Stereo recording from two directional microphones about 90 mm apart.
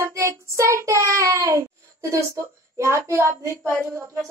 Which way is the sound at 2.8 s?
35° right (ahead or behind).